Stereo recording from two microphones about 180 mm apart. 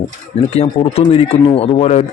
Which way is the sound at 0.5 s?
35° left (ahead or behind).